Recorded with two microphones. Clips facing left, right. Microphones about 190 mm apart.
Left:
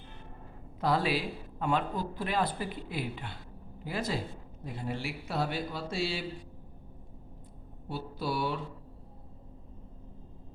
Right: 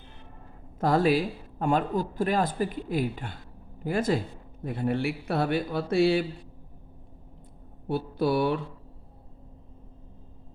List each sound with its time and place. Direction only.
0.8 s a man's voice: 45° right (ahead or behind)
7.9 s speech: 60° right (ahead or behind)